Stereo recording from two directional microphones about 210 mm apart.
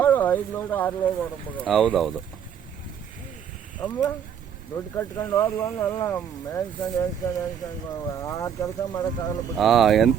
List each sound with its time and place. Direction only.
0.0 s speech: 10° left (ahead or behind)
3.8 s speech: 5° left (ahead or behind)
9.6 s speech: centre (ahead or behind)